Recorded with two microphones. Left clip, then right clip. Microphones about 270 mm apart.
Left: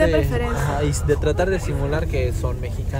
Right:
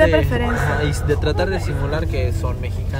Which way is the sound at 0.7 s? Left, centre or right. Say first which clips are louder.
Even; centre.